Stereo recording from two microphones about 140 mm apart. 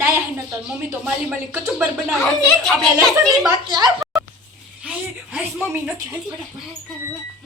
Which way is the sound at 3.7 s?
30° right (ahead or behind).